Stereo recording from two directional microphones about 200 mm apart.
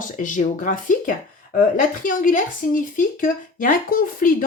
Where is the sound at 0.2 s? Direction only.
40° left (ahead or behind).